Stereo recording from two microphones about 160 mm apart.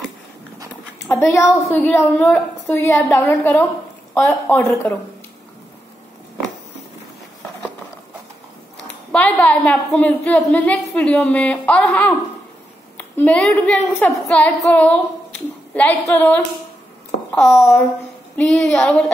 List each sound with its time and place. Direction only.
1.0 s a woman's voice: 20° left (ahead or behind)
9.1 s a woman's voice: 10° left (ahead or behind)